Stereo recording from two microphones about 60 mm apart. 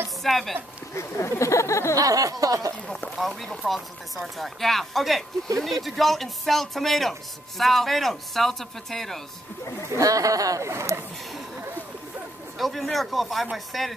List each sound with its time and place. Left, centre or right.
0.2 s a man's voice: centre
0.9 s speech: left
2.0 s speech: right
3.2 s a man's voice: centre
9.9 s speech: right
10.7 s speech: right
12.5 s a man's voice: centre